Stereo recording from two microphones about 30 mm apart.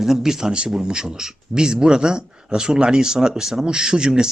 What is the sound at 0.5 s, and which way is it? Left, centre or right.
Speech, right.